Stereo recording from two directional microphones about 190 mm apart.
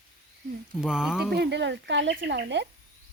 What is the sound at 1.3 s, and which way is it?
Speech, 60° right (ahead or behind).